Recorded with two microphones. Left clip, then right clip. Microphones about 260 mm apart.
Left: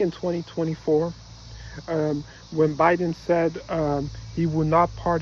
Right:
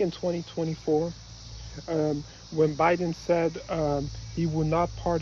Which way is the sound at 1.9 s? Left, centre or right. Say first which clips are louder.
Left 2 dB; centre.